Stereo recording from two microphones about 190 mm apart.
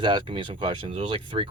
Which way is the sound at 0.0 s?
25° right (ahead or behind).